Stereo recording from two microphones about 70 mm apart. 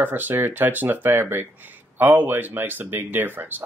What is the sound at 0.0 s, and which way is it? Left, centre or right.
Speech, right.